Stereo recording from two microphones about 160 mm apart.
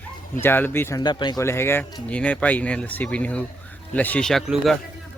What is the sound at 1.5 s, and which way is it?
Speech, 15° left (ahead or behind).